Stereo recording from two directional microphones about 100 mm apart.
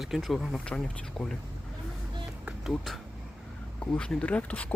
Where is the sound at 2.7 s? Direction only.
Centre (ahead or behind).